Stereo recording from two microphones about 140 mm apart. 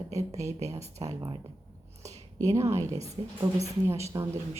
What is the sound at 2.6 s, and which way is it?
Speech, 20° right (ahead or behind).